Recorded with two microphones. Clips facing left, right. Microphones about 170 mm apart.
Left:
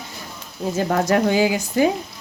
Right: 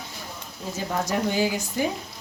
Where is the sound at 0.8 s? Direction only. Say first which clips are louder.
Left 8 dB; 70° left (ahead or behind); by 1.9 s 90° left.